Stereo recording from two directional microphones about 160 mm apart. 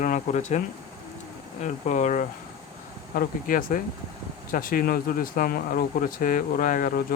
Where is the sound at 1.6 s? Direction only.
50° left (ahead or behind).